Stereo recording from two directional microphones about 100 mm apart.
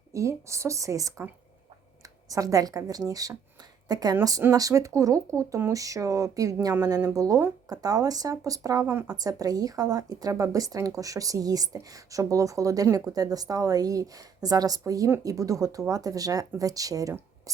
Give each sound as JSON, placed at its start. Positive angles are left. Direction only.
{"t": 0.1, "sound": "a woman's voice", "side_deg": -30}
{"t": 2.3, "sound": "a woman's voice", "side_deg": -35}